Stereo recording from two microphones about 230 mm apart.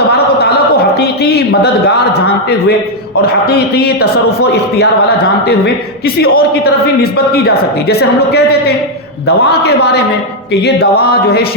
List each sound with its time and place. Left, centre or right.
0.9 s a sound: left
3.2 s speech: left
6.1 s speech: left